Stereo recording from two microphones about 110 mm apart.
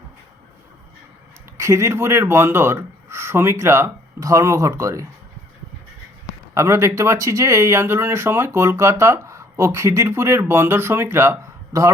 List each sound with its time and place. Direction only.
1.5 s speech: 25° right (ahead or behind)
6.5 s speech: 25° right (ahead or behind)